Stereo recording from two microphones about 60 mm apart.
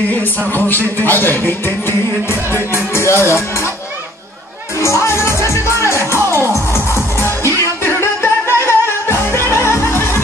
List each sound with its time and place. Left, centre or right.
0.2 s speech: left
4.8 s music: left